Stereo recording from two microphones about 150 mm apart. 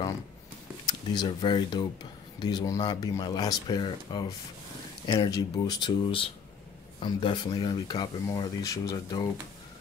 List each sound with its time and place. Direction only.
0.8 s speech: 30° left (ahead or behind)